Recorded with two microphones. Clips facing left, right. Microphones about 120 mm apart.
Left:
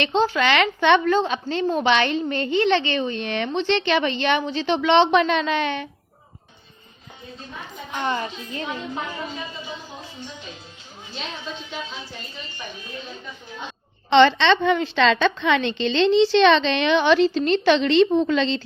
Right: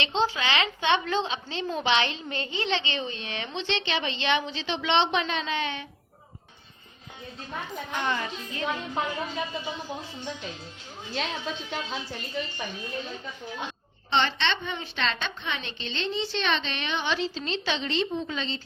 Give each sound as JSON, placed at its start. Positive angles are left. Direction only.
{"t": 0.0, "sound": "a woman's voice", "side_deg": 55}
{"t": 8.0, "sound": "a woman's voice", "side_deg": 30}
{"t": 14.1, "sound": "a woman's voice", "side_deg": 90}